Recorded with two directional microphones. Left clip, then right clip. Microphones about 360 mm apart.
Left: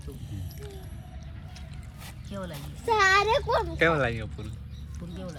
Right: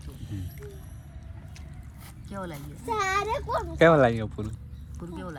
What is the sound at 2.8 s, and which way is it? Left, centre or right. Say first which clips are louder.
Speech: left 5 dB; left.